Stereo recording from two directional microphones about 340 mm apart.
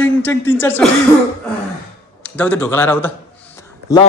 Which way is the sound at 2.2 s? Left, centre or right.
Centre.